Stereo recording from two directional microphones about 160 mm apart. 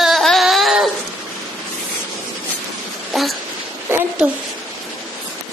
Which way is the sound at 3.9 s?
15° right (ahead or behind).